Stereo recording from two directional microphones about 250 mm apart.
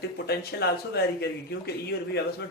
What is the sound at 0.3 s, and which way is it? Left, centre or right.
Speech, left.